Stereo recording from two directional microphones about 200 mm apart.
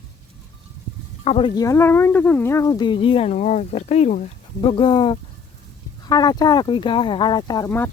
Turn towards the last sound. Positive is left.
turn(degrees=15)  # may be behind; listen again after turning